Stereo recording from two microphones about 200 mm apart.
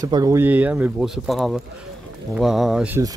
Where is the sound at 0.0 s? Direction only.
15° right (ahead or behind).